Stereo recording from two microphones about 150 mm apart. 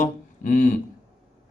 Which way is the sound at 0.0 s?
60° left (ahead or behind).